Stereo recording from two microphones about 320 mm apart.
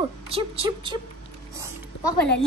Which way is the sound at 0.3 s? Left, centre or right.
Centre.